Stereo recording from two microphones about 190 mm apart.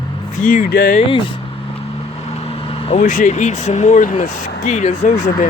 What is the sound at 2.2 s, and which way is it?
Vehicle, 35° left (ahead or behind).